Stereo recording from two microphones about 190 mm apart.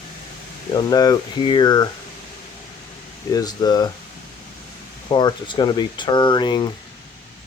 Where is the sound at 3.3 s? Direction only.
20° left (ahead or behind).